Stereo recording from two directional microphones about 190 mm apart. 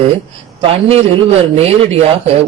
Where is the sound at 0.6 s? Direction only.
30° right (ahead or behind).